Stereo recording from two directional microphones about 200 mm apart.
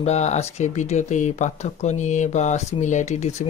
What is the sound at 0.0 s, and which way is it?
Speech, 35° left (ahead or behind).